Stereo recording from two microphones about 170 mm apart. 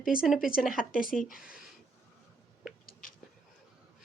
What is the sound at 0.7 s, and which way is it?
Speech, 55° left (ahead or behind).